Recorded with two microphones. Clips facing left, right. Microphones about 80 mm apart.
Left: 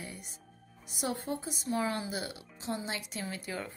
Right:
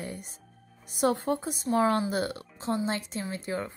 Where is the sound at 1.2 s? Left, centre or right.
Right.